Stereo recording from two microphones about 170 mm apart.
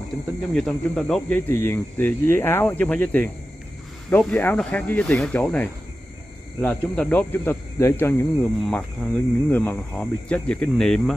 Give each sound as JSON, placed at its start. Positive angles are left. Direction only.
{"t": 0.6, "sound": "speech", "side_deg": 5}